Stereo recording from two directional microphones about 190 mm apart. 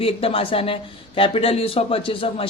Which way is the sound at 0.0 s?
30° left (ahead or behind).